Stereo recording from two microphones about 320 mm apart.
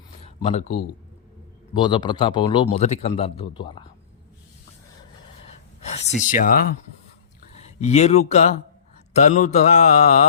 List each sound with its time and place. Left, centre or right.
0.3 s a sound: centre
1.7 s speech: centre
5.8 s a sound: centre
6.2 s mantra: left
7.5 s speech: left
9.1 s mantra: left